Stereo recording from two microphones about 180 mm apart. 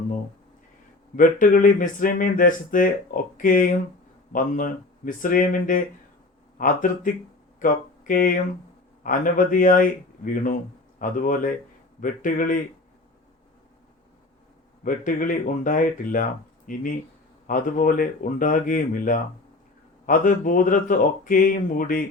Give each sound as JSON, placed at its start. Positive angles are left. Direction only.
{"t": 1.1, "sound": "speech", "side_deg": 50}
{"t": 7.6, "sound": "a sound", "side_deg": 50}
{"t": 9.0, "sound": "speech", "side_deg": 50}
{"t": 14.8, "sound": "speech", "side_deg": 50}